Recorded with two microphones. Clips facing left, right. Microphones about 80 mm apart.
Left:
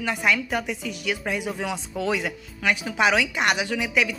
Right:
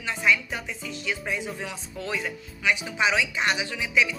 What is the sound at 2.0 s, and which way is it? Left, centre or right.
Speech, left.